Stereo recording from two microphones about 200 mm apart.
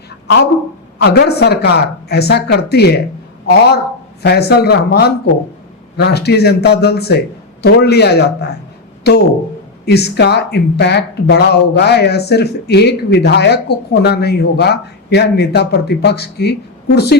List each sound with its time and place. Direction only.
0.9 s speech: 55° left (ahead or behind)